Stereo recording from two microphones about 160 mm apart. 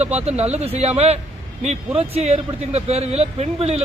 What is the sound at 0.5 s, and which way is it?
Speech, 40° right (ahead or behind).